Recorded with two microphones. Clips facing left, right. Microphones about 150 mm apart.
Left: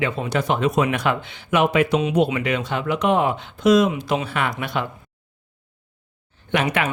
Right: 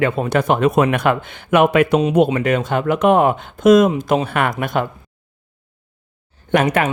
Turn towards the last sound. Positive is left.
turn(degrees=-45)  # may be behind; listen again after turning